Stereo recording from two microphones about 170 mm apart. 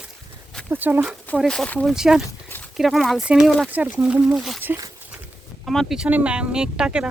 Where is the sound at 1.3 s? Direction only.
5° left (ahead or behind).